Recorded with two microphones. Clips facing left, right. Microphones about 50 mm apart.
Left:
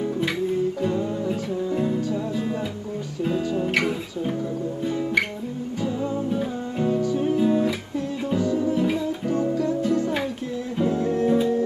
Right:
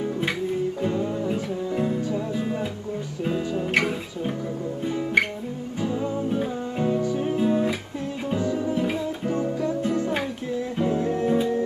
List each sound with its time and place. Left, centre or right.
0.8 s music: centre
3.5 s music: centre
4.8 s music: centre
8.4 s music: right
8.7 s music: centre
9.3 s music: right
10.8 s music: centre